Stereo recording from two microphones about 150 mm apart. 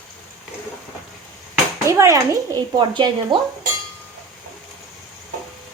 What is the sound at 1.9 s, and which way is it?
Speech, 20° right (ahead or behind).